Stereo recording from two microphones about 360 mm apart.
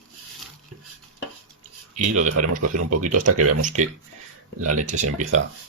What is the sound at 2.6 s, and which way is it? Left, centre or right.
Speech, right.